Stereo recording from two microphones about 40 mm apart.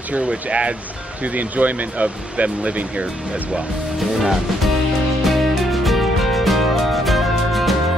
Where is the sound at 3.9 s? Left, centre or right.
Centre.